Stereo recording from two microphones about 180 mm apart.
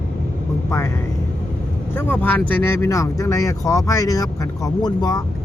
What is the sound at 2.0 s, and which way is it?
Speech, 10° left (ahead or behind).